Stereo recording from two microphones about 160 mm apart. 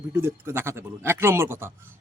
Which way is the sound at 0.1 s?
15° right (ahead or behind).